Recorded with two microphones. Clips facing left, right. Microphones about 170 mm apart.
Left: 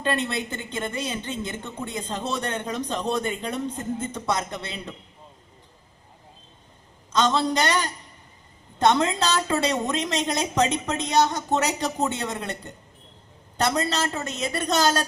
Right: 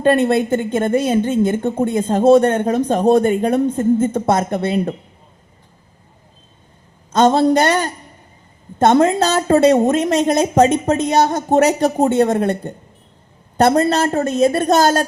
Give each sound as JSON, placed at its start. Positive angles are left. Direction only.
{"t": 0.0, "sound": "a woman's voice", "side_deg": -50}
{"t": 7.1, "sound": "a woman's voice", "side_deg": -55}